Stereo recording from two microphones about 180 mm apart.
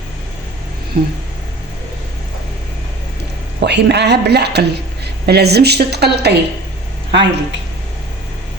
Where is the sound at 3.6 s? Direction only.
70° right (ahead or behind).